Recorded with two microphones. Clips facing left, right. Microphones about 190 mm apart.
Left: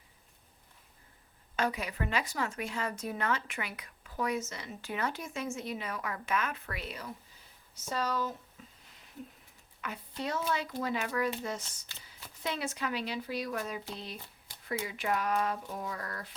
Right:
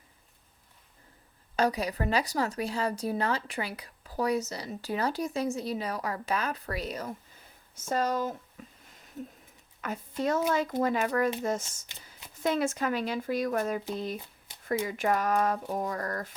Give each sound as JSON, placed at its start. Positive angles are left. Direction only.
{"t": 1.5, "sound": "speech", "side_deg": -35}
{"t": 9.8, "sound": "speech", "side_deg": -45}